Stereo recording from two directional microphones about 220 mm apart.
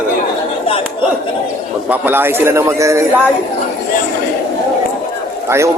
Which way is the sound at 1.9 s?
10° right (ahead or behind).